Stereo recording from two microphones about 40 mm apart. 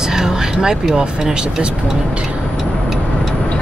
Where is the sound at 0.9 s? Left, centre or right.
Right.